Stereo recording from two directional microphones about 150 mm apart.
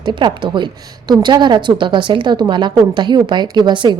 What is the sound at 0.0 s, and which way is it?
A woman's voice, 30° right (ahead or behind).